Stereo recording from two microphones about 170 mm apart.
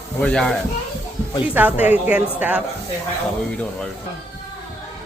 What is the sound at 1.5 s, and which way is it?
Speech, 10° right (ahead or behind).